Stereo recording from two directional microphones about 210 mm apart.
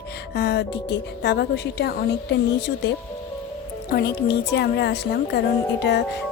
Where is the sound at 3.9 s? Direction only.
50° left (ahead or behind).